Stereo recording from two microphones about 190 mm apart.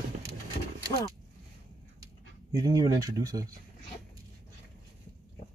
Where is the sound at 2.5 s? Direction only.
20° right (ahead or behind).